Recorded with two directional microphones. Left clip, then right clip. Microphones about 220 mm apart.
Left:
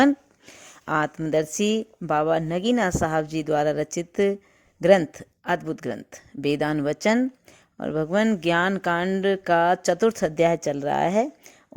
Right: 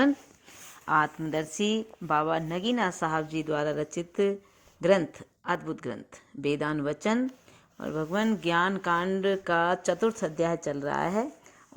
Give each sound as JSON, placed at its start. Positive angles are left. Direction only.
{"t": 0.6, "sound": "speech", "side_deg": 40}